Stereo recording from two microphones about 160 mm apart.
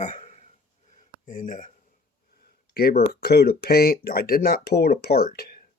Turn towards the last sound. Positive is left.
turn(degrees=75)  # may be behind; listen again after turning